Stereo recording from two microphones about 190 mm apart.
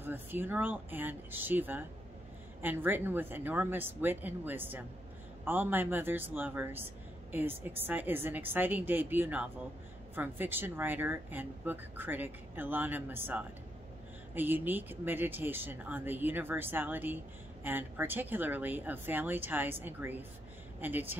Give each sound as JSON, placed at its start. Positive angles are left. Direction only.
{"t": 0.0, "sound": "speech", "side_deg": -10}